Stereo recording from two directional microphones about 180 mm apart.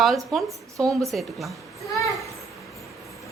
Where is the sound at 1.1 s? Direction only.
Centre (ahead or behind).